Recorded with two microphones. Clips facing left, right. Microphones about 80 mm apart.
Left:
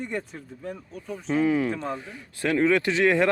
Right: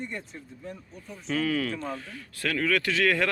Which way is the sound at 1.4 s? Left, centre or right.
Left.